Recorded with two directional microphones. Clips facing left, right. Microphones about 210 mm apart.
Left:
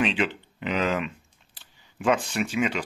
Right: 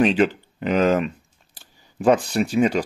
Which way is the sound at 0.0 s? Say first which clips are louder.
Right 8 dB; 40° right (ahead or behind).